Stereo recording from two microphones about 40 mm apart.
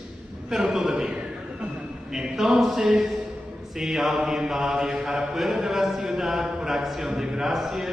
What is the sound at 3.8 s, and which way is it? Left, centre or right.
Mantra, centre.